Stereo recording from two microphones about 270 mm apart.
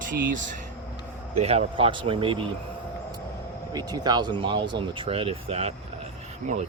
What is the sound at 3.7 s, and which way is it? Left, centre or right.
Speech, centre.